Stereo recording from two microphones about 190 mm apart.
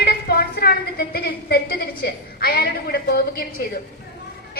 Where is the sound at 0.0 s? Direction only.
55° left (ahead or behind).